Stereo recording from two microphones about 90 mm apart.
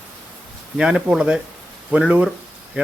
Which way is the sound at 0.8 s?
10° right (ahead or behind).